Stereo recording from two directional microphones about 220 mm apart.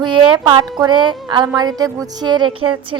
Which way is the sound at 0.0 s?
20° right (ahead or behind).